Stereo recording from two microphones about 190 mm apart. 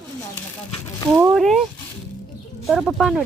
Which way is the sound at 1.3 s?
Centre (ahead or behind).